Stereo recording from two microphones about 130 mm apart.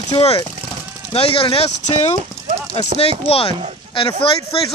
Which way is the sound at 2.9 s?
50° left (ahead or behind).